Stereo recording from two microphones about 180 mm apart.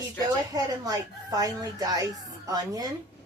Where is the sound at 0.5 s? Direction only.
20° right (ahead or behind).